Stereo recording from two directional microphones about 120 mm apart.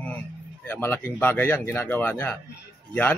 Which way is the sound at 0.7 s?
15° left (ahead or behind).